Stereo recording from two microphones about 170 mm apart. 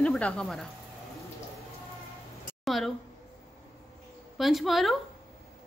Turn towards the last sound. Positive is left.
turn(degrees=0)  # may be behind; listen again after turning